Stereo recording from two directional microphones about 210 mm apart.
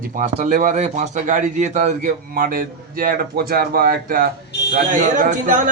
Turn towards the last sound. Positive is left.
turn(degrees=-40)  # may be behind; listen again after turning